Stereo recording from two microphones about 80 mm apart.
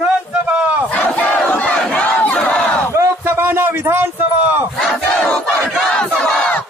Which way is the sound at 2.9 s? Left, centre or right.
Right.